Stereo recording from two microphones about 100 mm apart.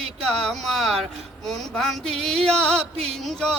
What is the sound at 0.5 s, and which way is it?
Speech, centre (ahead or behind).